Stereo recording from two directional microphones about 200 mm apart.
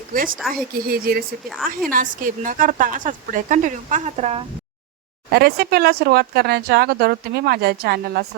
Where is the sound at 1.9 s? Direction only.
45° right (ahead or behind).